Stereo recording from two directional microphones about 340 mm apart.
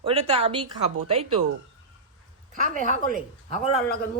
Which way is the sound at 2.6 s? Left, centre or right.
Right.